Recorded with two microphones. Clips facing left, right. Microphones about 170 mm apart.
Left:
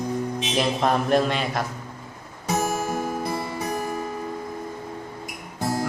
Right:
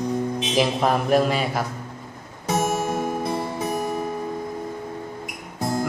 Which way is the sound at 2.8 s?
25° right (ahead or behind).